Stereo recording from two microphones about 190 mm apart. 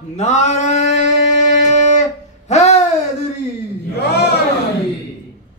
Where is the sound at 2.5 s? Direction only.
35° left (ahead or behind).